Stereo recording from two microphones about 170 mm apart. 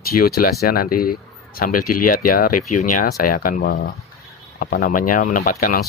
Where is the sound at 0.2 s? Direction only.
60° left (ahead or behind).